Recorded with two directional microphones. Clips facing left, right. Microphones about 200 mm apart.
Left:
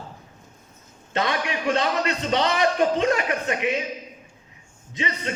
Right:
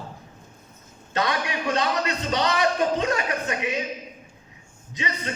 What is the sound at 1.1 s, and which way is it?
A man's voice, 25° left (ahead or behind).